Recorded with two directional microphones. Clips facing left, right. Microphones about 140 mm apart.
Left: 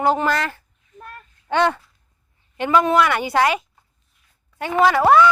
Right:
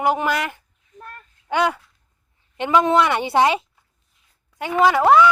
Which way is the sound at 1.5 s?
10° right (ahead or behind).